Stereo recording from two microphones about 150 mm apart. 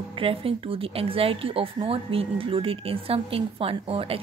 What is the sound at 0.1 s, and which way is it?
Speech, 35° right (ahead or behind).